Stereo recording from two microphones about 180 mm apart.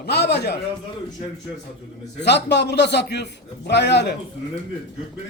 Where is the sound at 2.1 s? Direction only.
70° left (ahead or behind).